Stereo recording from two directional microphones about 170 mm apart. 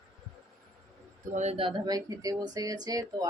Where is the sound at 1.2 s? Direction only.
45° right (ahead or behind).